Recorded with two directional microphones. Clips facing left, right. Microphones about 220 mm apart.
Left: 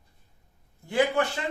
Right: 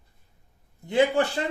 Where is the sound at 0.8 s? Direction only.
25° right (ahead or behind).